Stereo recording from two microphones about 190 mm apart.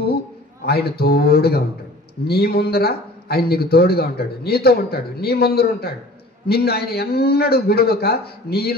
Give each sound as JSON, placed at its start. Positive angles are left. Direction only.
{"t": 0.7, "sound": "speech", "side_deg": 55}